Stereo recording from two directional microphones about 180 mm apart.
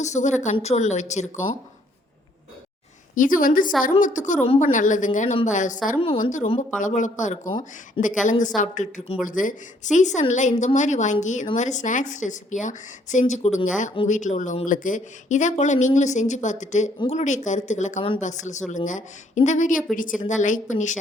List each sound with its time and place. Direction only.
0.0 s speech: 40° left (ahead or behind)
3.2 s a woman's voice: 50° left (ahead or behind)